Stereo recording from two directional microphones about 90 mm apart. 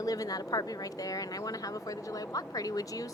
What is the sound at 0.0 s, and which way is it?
A woman's voice, 40° left (ahead or behind).